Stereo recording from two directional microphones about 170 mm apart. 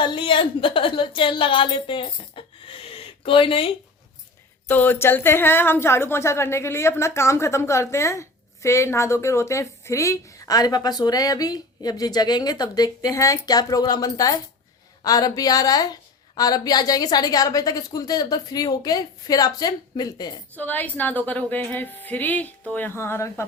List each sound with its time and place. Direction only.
0.0 s a woman's voice: 30° left (ahead or behind)
4.7 s a woman's voice: 10° left (ahead or behind)
20.6 s a woman's voice: 10° left (ahead or behind)